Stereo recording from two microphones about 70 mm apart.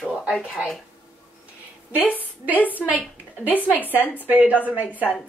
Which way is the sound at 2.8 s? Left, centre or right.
Centre.